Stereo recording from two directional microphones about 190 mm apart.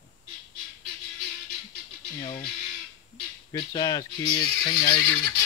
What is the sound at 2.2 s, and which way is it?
Speech, 25° left (ahead or behind).